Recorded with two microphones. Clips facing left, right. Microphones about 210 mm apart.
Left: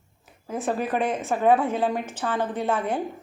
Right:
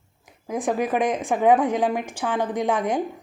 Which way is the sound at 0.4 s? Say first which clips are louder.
Right 3 dB; 15° right (ahead or behind).